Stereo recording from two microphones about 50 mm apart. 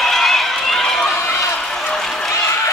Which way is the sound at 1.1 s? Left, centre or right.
Left.